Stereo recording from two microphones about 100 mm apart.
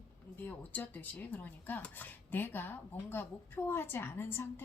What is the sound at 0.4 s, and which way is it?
Speech, 15° left (ahead or behind).